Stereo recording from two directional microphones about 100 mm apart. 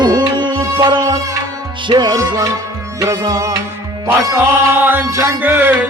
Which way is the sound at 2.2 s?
35° right (ahead or behind).